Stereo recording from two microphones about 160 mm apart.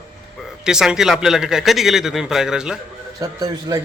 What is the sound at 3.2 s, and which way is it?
Speech, 20° right (ahead or behind).